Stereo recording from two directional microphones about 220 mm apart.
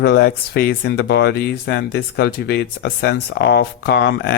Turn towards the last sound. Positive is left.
turn(degrees=50)  # may be behind; listen again after turning